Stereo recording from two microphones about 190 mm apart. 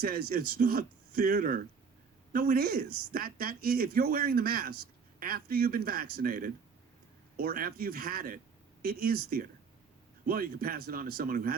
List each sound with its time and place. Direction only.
0.0 s speech: 50° right (ahead or behind)